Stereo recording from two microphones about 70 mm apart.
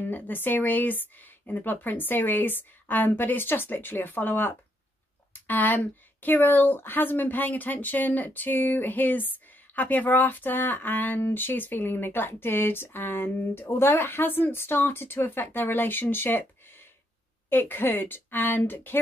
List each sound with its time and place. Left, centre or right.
0.0 s speech: left